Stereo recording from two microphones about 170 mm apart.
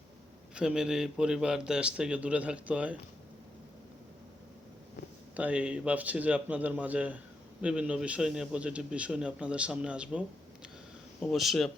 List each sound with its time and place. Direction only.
0.5 s a man's voice: 5° right (ahead or behind)
5.4 s a man's voice: 5° right (ahead or behind)